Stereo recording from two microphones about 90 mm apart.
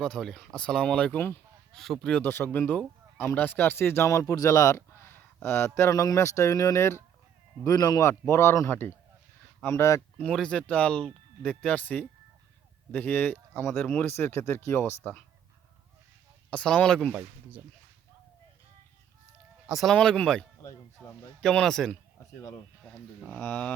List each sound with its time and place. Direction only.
0.0 s speech: 5° left (ahead or behind)
2.3 s speech: 20° left (ahead or behind)
10.3 s speech: 10° left (ahead or behind)
16.5 s speech: 10° left (ahead or behind)
19.6 s speech: 5° right (ahead or behind)
19.9 s speech: 10° left (ahead or behind)
21.4 s speech: 5° left (ahead or behind)